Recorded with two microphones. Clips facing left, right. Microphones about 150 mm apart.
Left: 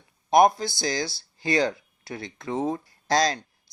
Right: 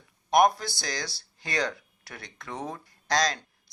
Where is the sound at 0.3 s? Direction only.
25° left (ahead or behind).